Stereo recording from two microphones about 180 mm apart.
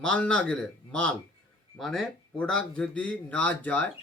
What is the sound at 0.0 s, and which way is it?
Speech, 5° left (ahead or behind).